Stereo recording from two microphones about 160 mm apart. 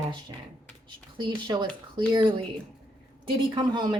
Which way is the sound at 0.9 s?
30° right (ahead or behind).